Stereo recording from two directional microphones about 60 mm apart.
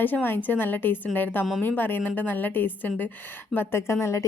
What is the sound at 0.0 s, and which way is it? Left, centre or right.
A woman's voice, left.